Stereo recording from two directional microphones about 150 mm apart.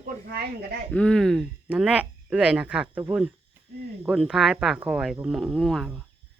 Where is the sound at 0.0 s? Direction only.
85° right.